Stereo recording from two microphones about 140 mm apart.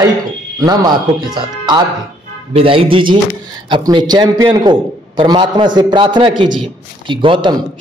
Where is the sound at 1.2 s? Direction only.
30° right (ahead or behind).